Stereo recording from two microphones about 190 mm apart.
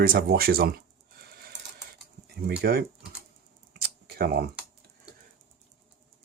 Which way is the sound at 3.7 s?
50° right (ahead or behind).